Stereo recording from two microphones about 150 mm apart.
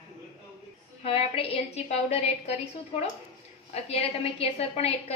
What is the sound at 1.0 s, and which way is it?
A woman's voice, 40° left (ahead or behind).